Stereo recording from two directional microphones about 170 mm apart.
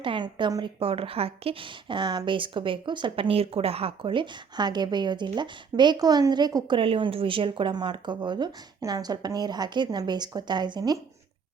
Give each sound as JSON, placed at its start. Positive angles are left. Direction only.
{"t": 0.0, "sound": "speech", "side_deg": -30}